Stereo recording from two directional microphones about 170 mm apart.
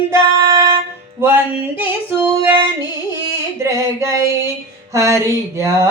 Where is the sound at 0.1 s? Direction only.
15° right (ahead or behind).